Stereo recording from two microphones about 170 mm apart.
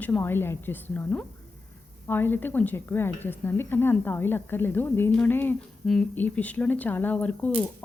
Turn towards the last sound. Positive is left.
turn(degrees=10)  # may be behind; listen again after turning